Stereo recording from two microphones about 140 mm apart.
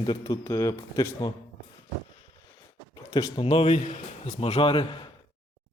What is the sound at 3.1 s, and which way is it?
Speech, 30° left (ahead or behind).